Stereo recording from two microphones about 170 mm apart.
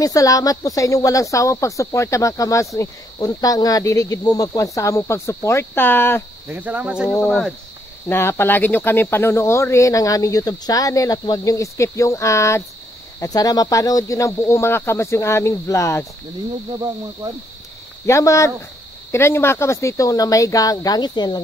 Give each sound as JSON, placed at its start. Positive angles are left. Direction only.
{"t": 0.0, "sound": "speech", "side_deg": 20}
{"t": 6.5, "sound": "cricket", "side_deg": -10}
{"t": 7.2, "sound": "speech", "side_deg": 0}
{"t": 8.1, "sound": "speech", "side_deg": 15}
{"t": 18.0, "sound": "speech", "side_deg": 15}